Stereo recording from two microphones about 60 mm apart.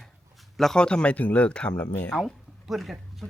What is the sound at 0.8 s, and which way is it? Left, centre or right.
Speech, centre.